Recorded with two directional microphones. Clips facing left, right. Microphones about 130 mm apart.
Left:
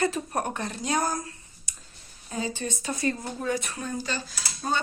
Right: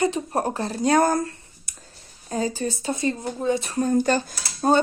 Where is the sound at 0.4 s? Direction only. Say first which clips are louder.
Right 6 dB; 35° right (ahead or behind).